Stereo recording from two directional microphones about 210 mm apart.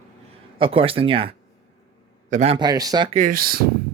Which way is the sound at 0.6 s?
25° right (ahead or behind).